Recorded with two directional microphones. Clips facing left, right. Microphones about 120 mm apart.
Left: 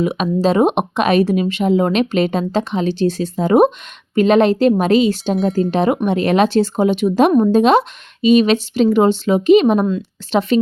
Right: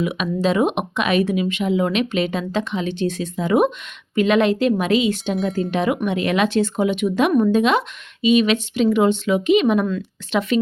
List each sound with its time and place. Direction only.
0.0 s speech: 35° left (ahead or behind)